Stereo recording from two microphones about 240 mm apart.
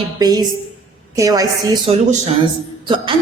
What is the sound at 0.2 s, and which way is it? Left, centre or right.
A woman's voice, centre.